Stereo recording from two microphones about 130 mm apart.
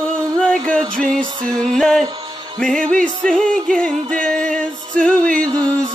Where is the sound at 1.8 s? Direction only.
5° left (ahead or behind).